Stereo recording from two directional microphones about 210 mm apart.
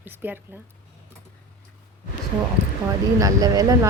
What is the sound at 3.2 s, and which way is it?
Speech, 15° right (ahead or behind).